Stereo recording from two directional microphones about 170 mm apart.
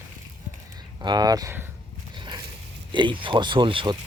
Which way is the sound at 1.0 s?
25° right (ahead or behind).